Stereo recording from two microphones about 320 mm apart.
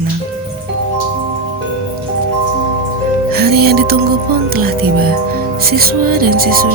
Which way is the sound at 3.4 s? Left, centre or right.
Right.